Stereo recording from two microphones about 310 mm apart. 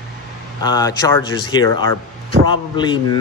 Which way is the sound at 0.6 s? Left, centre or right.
Centre.